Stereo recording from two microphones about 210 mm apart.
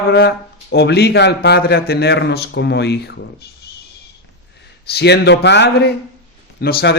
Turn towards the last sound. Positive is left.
turn(degrees=45)  # may be behind; listen again after turning